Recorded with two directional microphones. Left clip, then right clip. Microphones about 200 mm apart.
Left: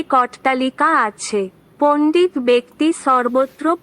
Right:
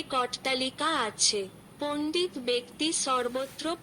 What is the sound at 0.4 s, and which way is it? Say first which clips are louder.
A woman's voice: left 13 dB; 20° right (ahead or behind).